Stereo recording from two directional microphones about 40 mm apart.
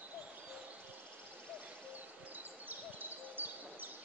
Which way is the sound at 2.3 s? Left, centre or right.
Right.